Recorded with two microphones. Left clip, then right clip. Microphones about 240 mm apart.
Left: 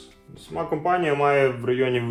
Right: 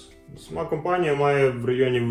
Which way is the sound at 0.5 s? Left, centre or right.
Left.